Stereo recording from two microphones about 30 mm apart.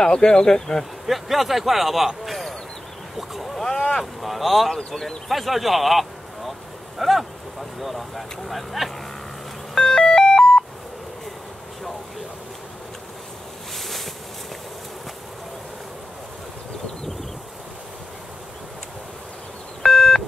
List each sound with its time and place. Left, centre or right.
0.0 s speech: left
1.0 s speech: centre
4.0 s speech: centre
4.6 s speech: centre
5.3 s speech: centre
9.8 s a sound: left
13.7 s boat: centre
19.8 s beep: left